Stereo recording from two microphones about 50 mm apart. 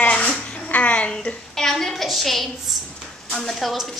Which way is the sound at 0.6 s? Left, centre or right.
Left.